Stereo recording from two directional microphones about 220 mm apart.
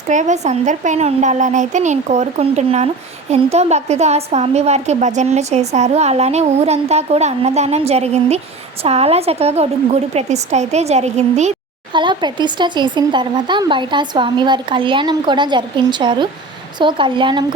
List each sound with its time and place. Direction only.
0.1 s a child's voice: 35° right (ahead or behind)
11.9 s a child's voice: 20° right (ahead or behind)